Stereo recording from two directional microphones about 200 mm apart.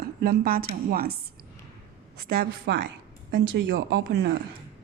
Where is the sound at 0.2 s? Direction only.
50° right (ahead or behind).